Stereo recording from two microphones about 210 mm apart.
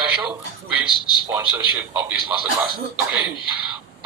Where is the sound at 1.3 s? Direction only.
15° right (ahead or behind).